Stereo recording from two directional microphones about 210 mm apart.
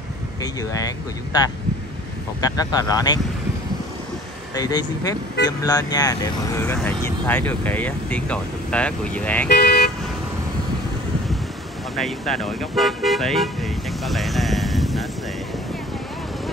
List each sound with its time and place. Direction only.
0.4 s speech: 15° left (ahead or behind)
4.6 s speech: 20° left (ahead or behind)
9.5 s speech: 50° left (ahead or behind)
11.9 s speech: centre (ahead or behind)